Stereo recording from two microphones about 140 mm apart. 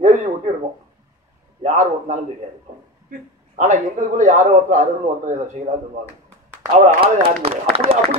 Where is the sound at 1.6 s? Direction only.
55° right (ahead or behind).